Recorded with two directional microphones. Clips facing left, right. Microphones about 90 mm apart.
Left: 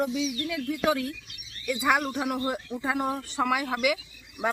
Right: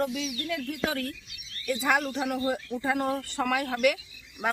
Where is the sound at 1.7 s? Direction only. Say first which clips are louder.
Left 1 dB; 10° left (ahead or behind).